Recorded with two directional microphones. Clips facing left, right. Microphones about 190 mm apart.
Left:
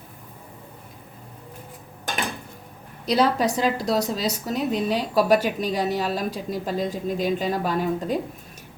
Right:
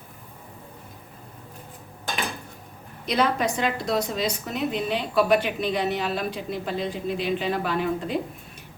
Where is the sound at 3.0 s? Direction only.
35° left (ahead or behind).